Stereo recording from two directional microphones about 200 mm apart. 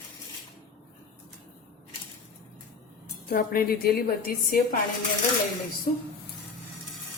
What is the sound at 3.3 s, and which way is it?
A woman's voice, 50° left (ahead or behind).